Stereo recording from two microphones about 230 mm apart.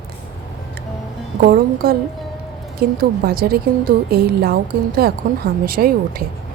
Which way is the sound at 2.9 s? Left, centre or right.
Right.